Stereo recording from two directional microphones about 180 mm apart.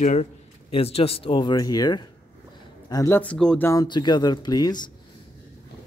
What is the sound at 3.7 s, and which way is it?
Speech, 20° left (ahead or behind).